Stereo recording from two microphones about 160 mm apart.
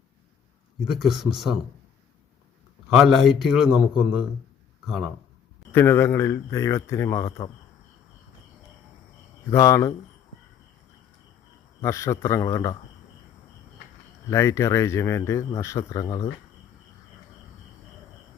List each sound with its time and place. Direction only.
0.9 s a man's voice: centre (ahead or behind)
2.9 s a man's voice: centre (ahead or behind)
5.7 s speech: 15° left (ahead or behind)
9.5 s a man's voice: 20° left (ahead or behind)
11.8 s a man's voice: 20° left (ahead or behind)
14.3 s speech: 20° left (ahead or behind)